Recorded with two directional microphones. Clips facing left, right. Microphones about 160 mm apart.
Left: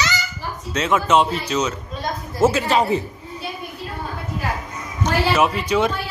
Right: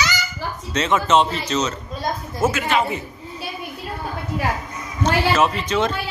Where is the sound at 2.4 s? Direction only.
35° left (ahead or behind).